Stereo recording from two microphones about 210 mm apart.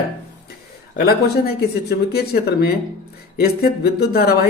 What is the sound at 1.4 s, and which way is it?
Speech, 50° left (ahead or behind).